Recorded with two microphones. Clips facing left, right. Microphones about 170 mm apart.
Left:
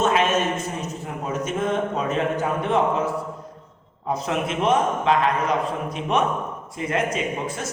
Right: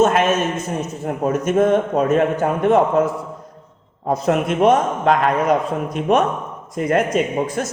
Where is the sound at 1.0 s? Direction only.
50° right (ahead or behind).